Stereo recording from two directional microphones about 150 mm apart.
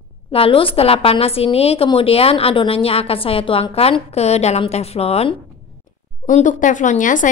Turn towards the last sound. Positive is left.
turn(degrees=60)  # may be behind; listen again after turning